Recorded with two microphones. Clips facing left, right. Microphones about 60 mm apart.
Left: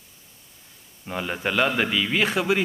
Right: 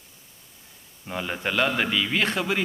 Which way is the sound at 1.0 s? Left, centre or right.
Centre.